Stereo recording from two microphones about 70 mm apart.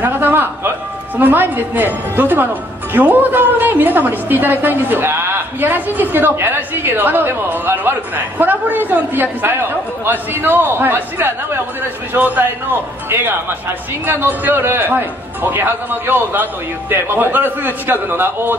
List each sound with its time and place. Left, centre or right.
0.0 s music: right
1.1 s speech: right
14.0 s speech: right